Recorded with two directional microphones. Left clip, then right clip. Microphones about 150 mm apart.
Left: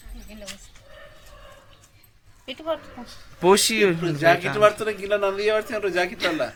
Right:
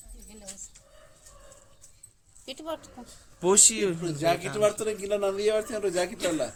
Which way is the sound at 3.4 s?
15° left (ahead or behind).